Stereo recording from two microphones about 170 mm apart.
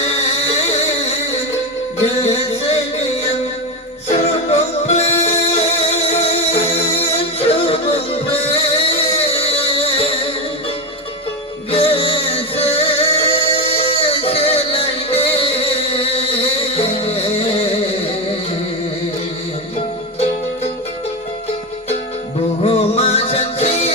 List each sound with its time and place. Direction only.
4.1 s music: 40° left (ahead or behind)
11.7 s music: 35° left (ahead or behind)
22.6 s music: 35° left (ahead or behind)